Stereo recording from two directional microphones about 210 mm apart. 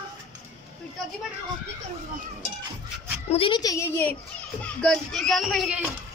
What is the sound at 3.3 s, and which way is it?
A woman's voice, 25° left (ahead or behind).